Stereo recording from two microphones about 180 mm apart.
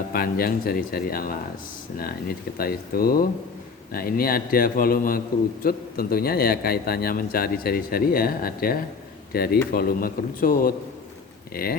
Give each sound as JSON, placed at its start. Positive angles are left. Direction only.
{"t": 0.1, "sound": "a man's voice", "side_deg": 55}